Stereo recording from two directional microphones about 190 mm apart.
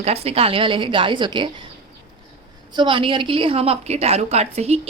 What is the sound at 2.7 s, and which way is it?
A woman's voice, 25° right (ahead or behind).